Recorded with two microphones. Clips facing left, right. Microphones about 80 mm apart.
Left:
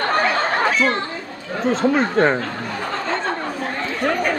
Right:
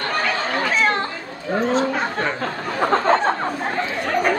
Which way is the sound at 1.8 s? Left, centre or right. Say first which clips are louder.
Left 5 dB; left.